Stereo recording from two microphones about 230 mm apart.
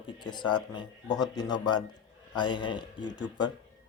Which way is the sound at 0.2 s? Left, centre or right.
Centre.